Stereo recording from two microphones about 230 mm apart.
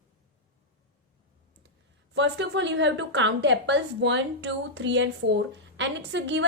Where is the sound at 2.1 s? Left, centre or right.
Right.